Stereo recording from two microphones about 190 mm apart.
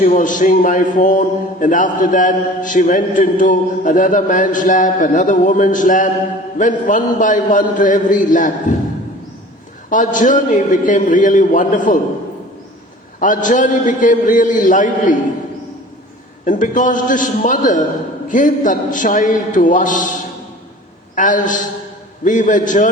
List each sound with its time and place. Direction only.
0.0 s a man's voice: 45° left (ahead or behind)
9.9 s a man's voice: 45° left (ahead or behind)
13.1 s a man's voice: 45° left (ahead or behind)
16.5 s a man's voice: 40° left (ahead or behind)